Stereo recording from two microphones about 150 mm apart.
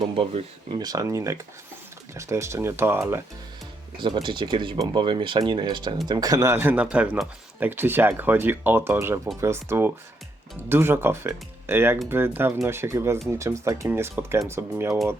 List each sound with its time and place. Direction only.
0.0 s speech: 35° right (ahead or behind); by 3.2 s 15° right (ahead or behind)
3.9 s speech: 30° right (ahead or behind); by 14.9 s 15° right (ahead or behind)